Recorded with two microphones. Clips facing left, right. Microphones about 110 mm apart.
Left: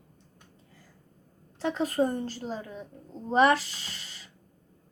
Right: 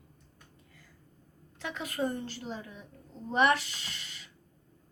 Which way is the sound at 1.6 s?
35° left (ahead or behind).